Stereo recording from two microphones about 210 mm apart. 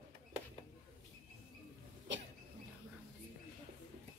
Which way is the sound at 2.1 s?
60° right (ahead or behind).